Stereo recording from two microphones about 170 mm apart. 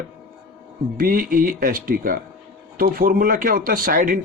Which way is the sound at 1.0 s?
55° right (ahead or behind).